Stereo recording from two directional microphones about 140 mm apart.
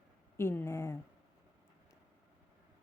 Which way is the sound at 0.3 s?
15° left (ahead or behind).